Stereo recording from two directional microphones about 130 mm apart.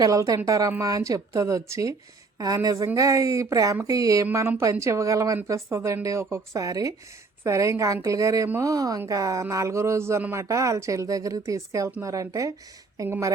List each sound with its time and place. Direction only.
0.0 s speech: 25° right (ahead or behind)